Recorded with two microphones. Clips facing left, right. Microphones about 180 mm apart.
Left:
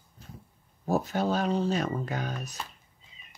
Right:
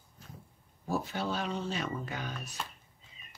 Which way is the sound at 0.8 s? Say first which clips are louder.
Left 6 dB; 40° left (ahead or behind).